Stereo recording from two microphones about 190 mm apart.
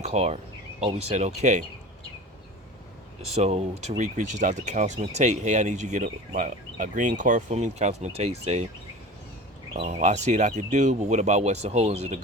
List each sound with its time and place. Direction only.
0.0 s speech: 35° right (ahead or behind)
3.2 s speech: 35° right (ahead or behind)
9.7 s speech: 35° right (ahead or behind)